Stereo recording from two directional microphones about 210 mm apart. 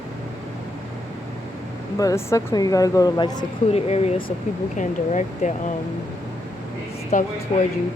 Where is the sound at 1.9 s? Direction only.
15° left (ahead or behind); by 5.5 s 35° left (ahead or behind).